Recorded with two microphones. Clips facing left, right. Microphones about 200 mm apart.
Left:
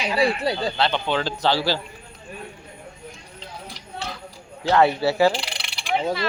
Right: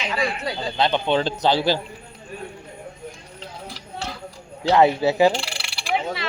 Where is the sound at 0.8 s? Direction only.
15° right (ahead or behind).